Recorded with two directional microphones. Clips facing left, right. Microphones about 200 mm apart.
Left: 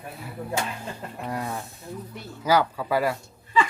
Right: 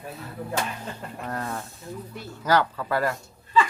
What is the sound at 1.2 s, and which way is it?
Speech, 10° left (ahead or behind).